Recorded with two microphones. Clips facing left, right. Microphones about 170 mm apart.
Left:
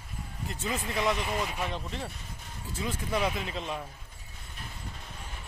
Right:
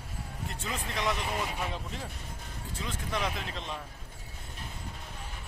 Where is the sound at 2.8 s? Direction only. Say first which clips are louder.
Left 4 dB; 5° left (ahead or behind).